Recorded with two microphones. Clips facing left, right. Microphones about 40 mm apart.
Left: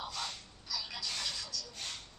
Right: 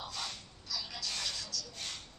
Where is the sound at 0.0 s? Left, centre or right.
Centre.